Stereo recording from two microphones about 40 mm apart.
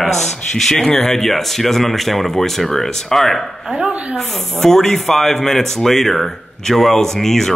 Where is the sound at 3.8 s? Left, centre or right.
Right.